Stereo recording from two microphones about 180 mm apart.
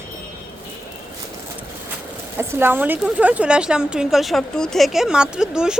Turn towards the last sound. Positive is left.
turn(degrees=-5)  # may be behind; listen again after turning